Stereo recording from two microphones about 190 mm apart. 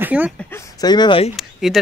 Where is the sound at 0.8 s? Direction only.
20° left (ahead or behind).